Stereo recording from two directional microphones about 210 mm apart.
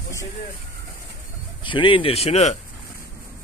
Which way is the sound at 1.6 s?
25° left (ahead or behind).